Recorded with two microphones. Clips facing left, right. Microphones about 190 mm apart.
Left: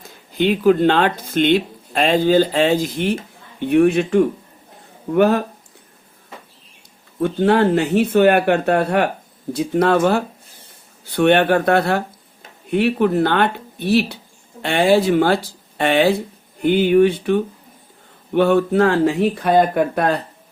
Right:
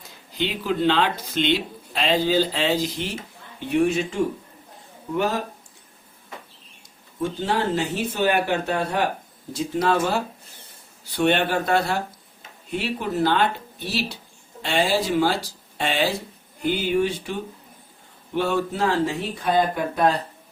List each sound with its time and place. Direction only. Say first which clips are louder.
0.3 s speech: left 10 dB; 50° left (ahead or behind)
7.2 s speech: left 9 dB; 60° left (ahead or behind)